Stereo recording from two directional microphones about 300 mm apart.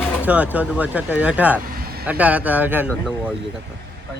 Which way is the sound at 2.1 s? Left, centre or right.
Centre.